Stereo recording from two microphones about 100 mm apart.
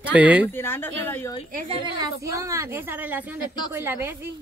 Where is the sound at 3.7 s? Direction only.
25° right (ahead or behind).